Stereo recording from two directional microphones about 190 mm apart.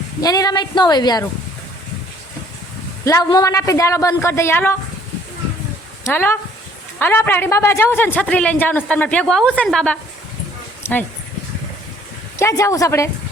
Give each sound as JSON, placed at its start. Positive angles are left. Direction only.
{"t": 0.2, "sound": "a woman's voice", "side_deg": 20}
{"t": 3.0, "sound": "a woman's voice", "side_deg": 15}
{"t": 6.1, "sound": "a woman's voice", "side_deg": 10}
{"t": 12.4, "sound": "a woman's voice", "side_deg": 15}